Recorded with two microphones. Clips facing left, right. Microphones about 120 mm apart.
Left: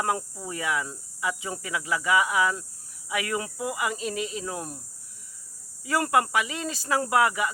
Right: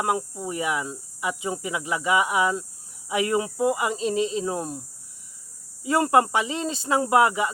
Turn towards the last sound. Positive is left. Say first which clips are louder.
# right 3 dB
turn(degrees=-25)  # may be behind; listen again after turning